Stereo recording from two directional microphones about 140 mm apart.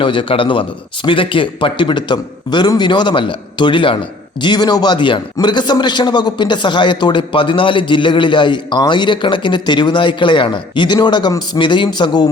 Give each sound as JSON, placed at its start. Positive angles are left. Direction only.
{"t": 0.0, "sound": "a man's voice", "side_deg": 35}